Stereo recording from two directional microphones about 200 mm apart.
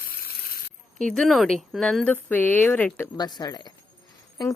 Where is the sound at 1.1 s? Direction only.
Centre (ahead or behind); by 3.6 s 20° left (ahead or behind).